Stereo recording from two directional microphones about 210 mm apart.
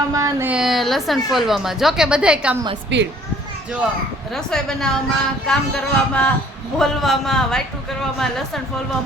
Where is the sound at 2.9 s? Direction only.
55° right (ahead or behind).